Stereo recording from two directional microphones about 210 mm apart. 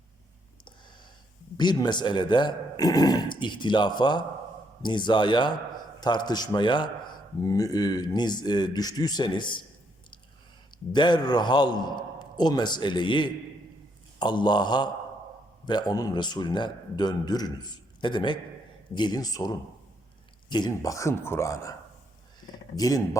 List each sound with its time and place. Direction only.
1.5 s a man's voice: 20° left (ahead or behind)
10.9 s a man's voice: 20° left (ahead or behind)